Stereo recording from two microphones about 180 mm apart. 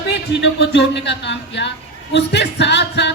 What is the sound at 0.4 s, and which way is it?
Music, 75° left (ahead or behind).